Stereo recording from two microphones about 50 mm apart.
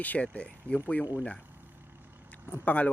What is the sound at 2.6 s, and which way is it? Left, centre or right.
Speech, left.